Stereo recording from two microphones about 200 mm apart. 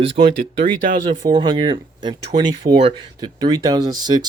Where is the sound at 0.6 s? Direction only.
45° right (ahead or behind).